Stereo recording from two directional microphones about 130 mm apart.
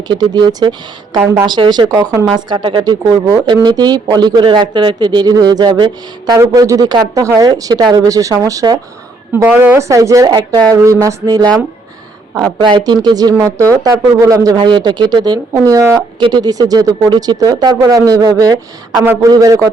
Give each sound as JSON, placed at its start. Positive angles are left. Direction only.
{"t": 0.1, "sound": "speech", "side_deg": -35}
{"t": 1.2, "sound": "speech", "side_deg": -20}
{"t": 1.5, "sound": "speech", "side_deg": -35}
{"t": 9.3, "sound": "speech", "side_deg": -15}
{"t": 12.5, "sound": "speech", "side_deg": -35}